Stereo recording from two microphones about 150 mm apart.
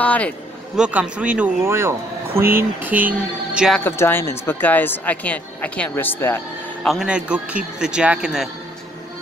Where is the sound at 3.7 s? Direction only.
15° left (ahead or behind).